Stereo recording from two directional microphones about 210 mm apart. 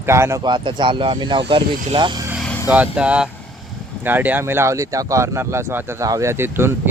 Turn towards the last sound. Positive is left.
turn(degrees=-10)  # may be behind; listen again after turning